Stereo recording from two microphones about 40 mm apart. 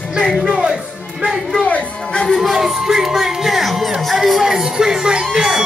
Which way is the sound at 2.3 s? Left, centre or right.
Centre.